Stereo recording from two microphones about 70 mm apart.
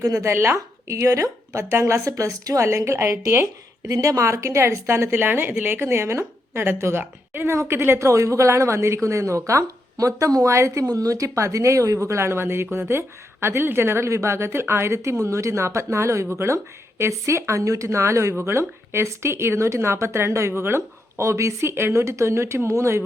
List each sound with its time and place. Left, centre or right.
0.0 s a woman's voice: right
2.6 s speech: right
7.9 s a woman's voice: right
10.8 s a woman's voice: right